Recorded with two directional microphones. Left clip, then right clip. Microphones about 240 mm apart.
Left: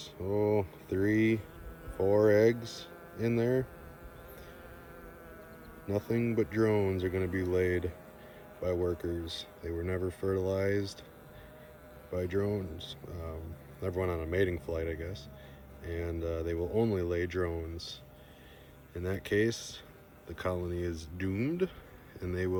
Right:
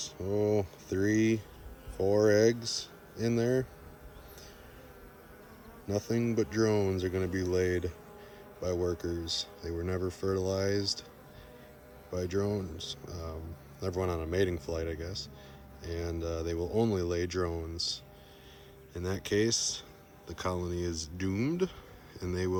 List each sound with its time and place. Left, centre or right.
0.0 s speech: centre
5.9 s speech: centre
12.1 s speech: centre
18.9 s speech: centre